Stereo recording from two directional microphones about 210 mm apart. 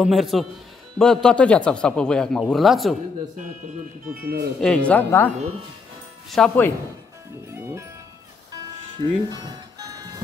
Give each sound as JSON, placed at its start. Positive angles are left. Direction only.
{"t": 0.0, "sound": "speech", "side_deg": 0}
{"t": 4.1, "sound": "speech", "side_deg": -45}
{"t": 4.6, "sound": "speech", "side_deg": 5}
{"t": 6.3, "sound": "speech", "side_deg": 5}
{"t": 7.5, "sound": "speech", "side_deg": -10}
{"t": 8.9, "sound": "speech", "side_deg": -20}